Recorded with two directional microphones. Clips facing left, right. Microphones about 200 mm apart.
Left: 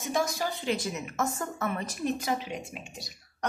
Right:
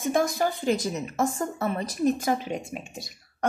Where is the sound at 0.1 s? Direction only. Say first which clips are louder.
Right 4 dB; 55° right (ahead or behind).